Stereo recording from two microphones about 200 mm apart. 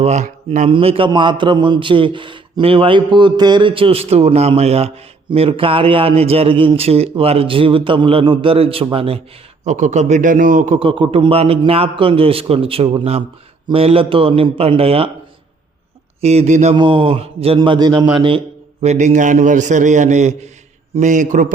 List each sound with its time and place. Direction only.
0.0 s a man's voice: 35° right (ahead or behind)
10.8 s a man's voice: 25° right (ahead or behind)
16.2 s a man's voice: 35° right (ahead or behind)
16.7 s a man's voice: 25° right (ahead or behind)